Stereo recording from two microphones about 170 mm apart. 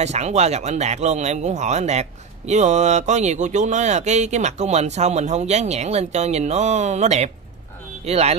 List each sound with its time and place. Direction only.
0.0 s speech: 40° right (ahead or behind)